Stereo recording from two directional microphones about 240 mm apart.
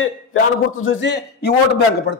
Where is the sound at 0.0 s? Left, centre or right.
Left.